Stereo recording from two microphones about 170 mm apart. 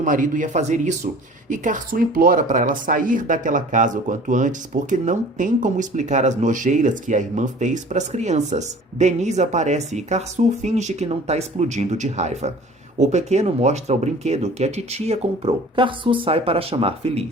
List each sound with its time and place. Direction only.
0.0 s speech: 50° right (ahead or behind); by 17.2 s 35° right (ahead or behind)